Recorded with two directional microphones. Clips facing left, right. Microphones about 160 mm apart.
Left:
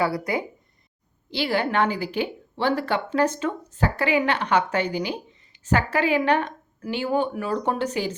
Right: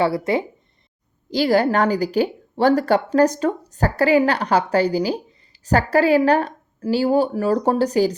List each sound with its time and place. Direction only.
0.0 s speech: 25° right (ahead or behind)
1.3 s a woman's voice: 40° right (ahead or behind)